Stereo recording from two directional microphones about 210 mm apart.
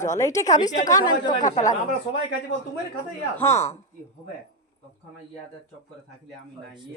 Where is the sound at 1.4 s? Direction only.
35° left (ahead or behind).